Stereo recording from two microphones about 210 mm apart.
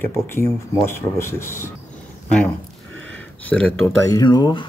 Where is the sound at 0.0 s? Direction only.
10° left (ahead or behind).